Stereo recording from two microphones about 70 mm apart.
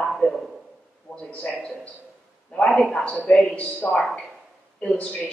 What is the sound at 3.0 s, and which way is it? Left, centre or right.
A man's voice, centre.